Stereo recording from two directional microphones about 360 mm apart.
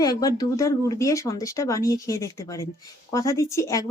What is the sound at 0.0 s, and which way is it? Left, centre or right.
Speech, centre.